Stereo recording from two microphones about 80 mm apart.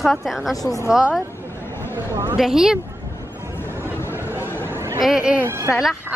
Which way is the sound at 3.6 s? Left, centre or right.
Right.